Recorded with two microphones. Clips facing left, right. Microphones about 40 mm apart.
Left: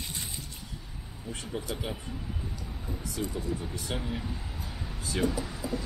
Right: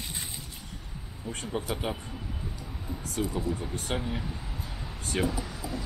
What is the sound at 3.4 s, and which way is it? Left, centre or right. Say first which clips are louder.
Speech: right 2 dB; centre.